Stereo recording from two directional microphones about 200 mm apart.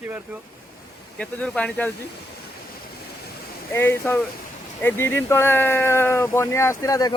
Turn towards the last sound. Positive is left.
turn(degrees=20)  # may be behind; listen again after turning